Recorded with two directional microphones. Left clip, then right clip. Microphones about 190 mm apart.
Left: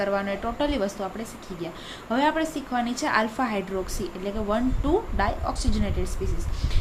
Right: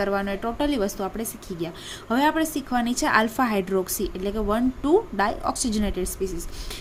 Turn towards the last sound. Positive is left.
turn(degrees=-45)  # may be behind; listen again after turning